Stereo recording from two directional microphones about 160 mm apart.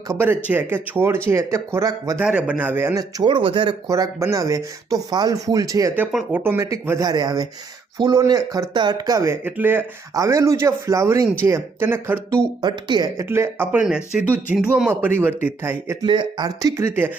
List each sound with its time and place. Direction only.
0.2 s speech: 10° right (ahead or behind)
2.1 s speech: 10° right (ahead or behind)
6.1 s speech: centre (ahead or behind)
6.4 s speech: 15° right (ahead or behind)
12.6 s speech: 25° right (ahead or behind)
13.2 s speech: 15° right (ahead or behind)
16.0 s speech: 25° right (ahead or behind)